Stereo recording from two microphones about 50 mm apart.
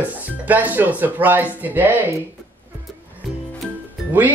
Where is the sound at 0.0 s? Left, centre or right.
Right.